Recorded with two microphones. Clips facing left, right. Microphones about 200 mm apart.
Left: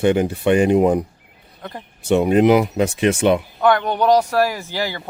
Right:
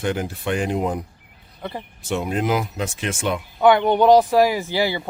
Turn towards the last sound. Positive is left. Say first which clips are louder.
# right 4 dB
turn(degrees=-10)  # may be behind; listen again after turning